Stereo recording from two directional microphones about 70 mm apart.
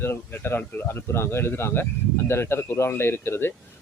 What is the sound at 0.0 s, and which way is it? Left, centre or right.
Speech, left.